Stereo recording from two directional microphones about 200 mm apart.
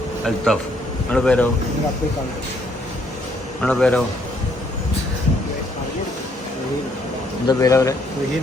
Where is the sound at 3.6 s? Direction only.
5° left (ahead or behind).